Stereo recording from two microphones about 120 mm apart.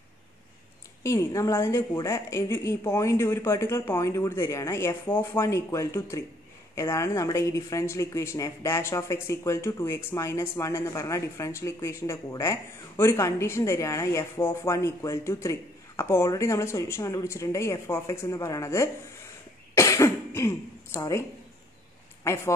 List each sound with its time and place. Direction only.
1.0 s speech: 25° left (ahead or behind)
19.7 s cough: 25° left (ahead or behind)
22.2 s speech: 25° left (ahead or behind)